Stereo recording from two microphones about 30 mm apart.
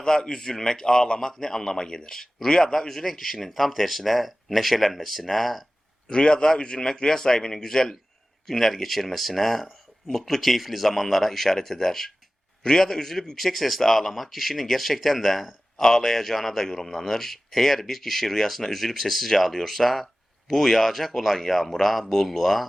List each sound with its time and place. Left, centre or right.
0.0 s a man's voice: left; by 5.6 s centre
6.1 s a man's voice: left; by 15.5 s centre
15.8 s speech: centre